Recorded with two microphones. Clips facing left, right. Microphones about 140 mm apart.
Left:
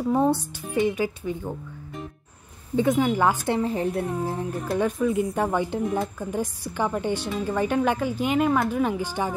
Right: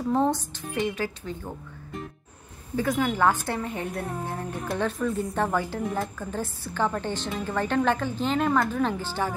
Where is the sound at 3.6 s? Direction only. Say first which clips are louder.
Left 6 dB; 30° left (ahead or behind).